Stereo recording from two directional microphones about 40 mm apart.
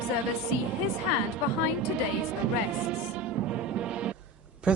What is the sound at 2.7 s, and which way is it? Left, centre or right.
Music, right.